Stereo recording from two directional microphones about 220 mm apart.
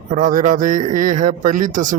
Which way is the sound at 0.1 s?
35° right (ahead or behind).